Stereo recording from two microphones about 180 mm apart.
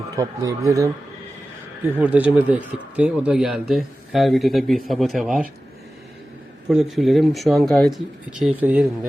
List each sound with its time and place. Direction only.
0.2 s speech: 20° right (ahead or behind)
2.0 s speech: 5° right (ahead or behind)
6.7 s speech: centre (ahead or behind)